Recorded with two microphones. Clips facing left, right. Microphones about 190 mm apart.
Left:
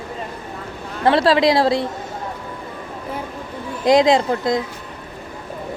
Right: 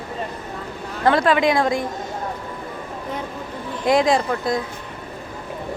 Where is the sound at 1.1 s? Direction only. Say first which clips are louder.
Left 2 dB; 30° left (ahead or behind).